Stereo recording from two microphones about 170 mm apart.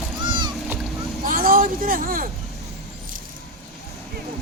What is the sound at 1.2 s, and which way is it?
Vehicle, 55° right (ahead or behind).